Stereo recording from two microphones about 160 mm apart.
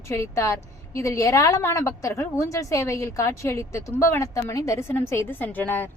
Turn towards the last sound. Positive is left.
turn(degrees=10)  # may be behind; listen again after turning